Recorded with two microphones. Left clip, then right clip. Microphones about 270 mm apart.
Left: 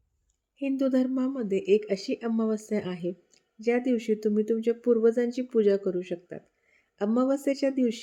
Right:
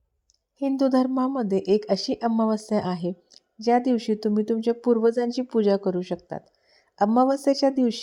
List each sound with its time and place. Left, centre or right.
0.9 s speech: centre
1.5 s speech: right
1.8 s speech: right